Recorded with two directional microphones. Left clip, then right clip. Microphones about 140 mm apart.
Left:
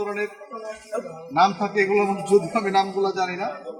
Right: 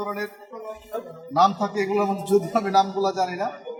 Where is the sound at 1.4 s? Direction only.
20° right (ahead or behind).